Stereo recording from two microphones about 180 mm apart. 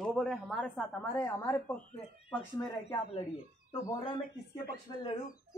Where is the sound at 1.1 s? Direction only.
20° left (ahead or behind).